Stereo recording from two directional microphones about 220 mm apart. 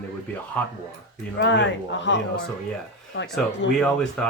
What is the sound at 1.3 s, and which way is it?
Speech, 50° left (ahead or behind).